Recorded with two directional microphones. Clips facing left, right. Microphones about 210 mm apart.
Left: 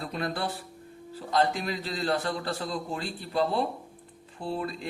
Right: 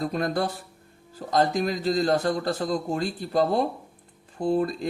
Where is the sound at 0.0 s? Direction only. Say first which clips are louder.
Right 6 dB; 45° right (ahead or behind).